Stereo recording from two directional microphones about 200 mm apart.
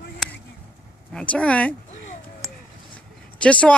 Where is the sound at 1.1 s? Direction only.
5° left (ahead or behind).